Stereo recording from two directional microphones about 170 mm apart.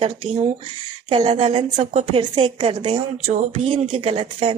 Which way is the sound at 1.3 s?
30° right (ahead or behind).